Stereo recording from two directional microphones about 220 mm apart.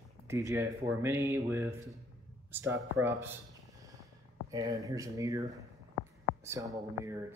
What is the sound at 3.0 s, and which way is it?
Speech, 10° right (ahead or behind).